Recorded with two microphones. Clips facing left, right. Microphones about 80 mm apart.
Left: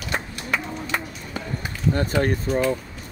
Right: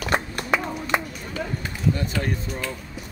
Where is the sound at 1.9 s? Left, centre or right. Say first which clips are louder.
Left 6 dB; left.